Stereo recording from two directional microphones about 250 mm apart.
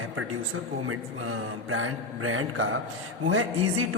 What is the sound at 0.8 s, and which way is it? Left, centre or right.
A man's voice, right.